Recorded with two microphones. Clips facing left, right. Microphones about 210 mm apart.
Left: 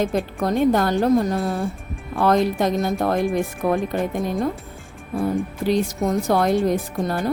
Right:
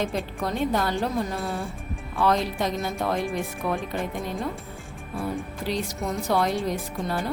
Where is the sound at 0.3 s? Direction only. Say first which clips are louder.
Left 8 dB; 50° left (ahead or behind).